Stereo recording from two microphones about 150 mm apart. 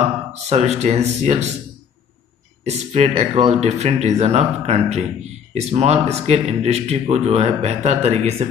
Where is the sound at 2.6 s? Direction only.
45° right (ahead or behind).